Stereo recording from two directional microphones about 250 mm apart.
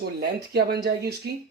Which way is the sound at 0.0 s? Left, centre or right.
Right.